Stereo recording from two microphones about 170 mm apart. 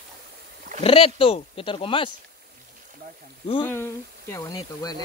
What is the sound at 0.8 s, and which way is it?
Speech, 30° left (ahead or behind).